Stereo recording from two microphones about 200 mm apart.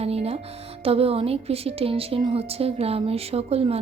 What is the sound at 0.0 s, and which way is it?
A woman's voice, 30° right (ahead or behind).